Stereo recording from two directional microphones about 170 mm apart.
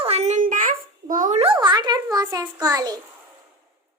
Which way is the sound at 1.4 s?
30° right (ahead or behind).